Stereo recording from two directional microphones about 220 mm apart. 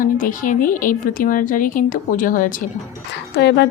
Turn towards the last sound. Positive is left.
turn(degrees=55)  # may be behind; listen again after turning